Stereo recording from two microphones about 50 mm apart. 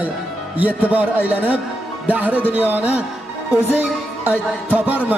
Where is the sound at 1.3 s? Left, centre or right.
Right.